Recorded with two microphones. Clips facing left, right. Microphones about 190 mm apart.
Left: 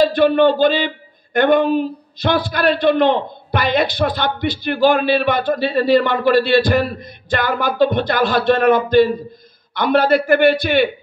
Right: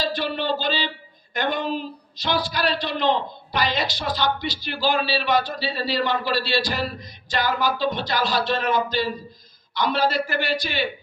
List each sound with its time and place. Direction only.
0.0 s speech: 55° left (ahead or behind)